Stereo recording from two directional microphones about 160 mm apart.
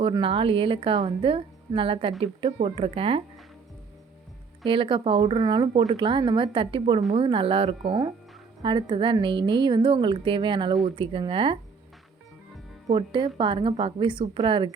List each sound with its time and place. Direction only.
0.0 s a woman's voice: 35° right (ahead or behind)
4.6 s a woman's voice: 30° right (ahead or behind)
12.9 s a woman's voice: 30° right (ahead or behind)